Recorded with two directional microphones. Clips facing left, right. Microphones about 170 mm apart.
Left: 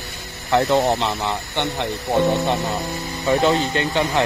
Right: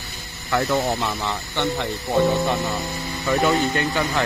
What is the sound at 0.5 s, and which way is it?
Speech, 20° left (ahead or behind).